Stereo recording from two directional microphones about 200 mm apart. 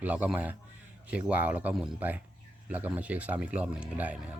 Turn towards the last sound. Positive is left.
turn(degrees=-5)  # may be behind; listen again after turning